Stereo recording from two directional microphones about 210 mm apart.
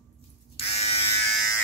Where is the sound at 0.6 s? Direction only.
30° left (ahead or behind).